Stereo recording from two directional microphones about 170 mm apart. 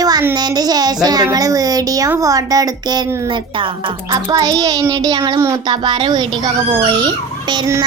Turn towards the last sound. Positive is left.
turn(degrees=-20)  # may be behind; listen again after turning